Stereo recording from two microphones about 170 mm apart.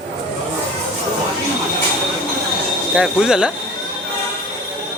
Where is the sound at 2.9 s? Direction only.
5° right (ahead or behind).